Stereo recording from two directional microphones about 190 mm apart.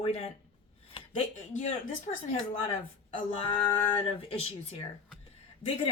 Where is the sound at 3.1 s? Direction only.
30° left (ahead or behind).